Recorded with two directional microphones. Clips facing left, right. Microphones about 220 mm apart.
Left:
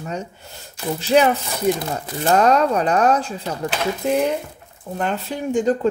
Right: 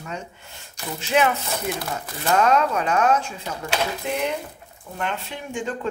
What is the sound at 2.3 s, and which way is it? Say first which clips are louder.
Speech: left 3 dB; 35° left (ahead or behind).